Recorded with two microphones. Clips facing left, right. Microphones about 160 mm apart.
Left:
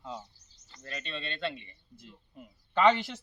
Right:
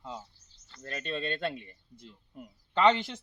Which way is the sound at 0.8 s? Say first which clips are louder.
Right 5 dB; 45° right (ahead or behind).